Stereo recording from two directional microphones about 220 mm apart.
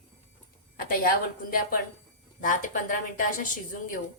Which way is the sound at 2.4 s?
40° left (ahead or behind).